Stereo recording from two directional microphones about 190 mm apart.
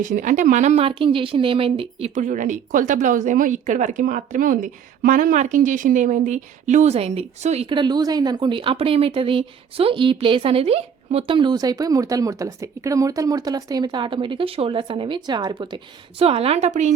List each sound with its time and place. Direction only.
0.0 s a woman's voice: 45° right (ahead or behind)